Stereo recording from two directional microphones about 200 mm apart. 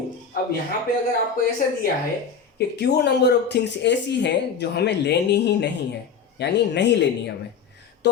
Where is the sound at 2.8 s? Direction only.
55° left (ahead or behind).